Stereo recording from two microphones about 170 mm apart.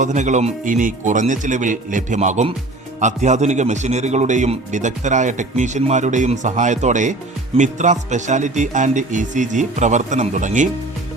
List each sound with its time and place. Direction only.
0.0 s a man's voice: 45° right (ahead or behind)